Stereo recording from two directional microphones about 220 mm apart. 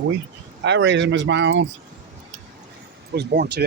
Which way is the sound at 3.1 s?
45° right (ahead or behind).